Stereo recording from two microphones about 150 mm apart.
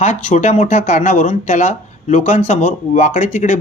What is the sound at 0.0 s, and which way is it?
Speech, 50° left (ahead or behind).